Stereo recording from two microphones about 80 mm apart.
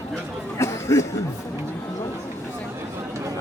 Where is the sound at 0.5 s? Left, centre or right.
Left.